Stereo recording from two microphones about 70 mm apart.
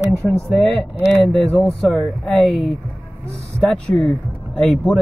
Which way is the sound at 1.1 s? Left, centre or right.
Centre.